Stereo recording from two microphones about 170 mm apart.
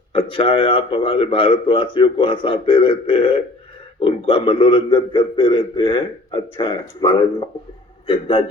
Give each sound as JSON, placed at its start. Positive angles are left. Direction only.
{"t": 0.1, "sound": "a man's voice", "side_deg": 30}